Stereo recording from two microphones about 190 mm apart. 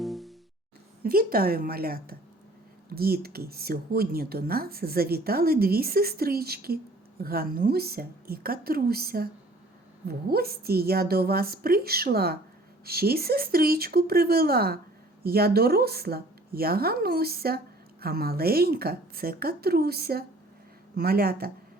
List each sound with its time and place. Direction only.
0.0 s music: centre (ahead or behind)
1.0 s speech: 50° right (ahead or behind)